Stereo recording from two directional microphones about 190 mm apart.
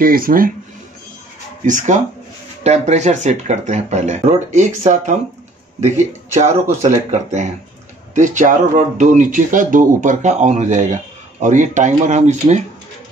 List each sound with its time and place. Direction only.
0.0 s speech: 50° right (ahead or behind)
1.7 s speech: 40° right (ahead or behind)